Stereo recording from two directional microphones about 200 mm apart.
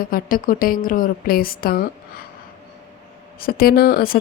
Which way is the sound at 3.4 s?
50° left (ahead or behind).